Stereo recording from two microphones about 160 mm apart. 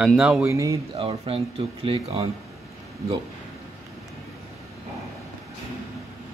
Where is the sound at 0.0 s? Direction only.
5° right (ahead or behind).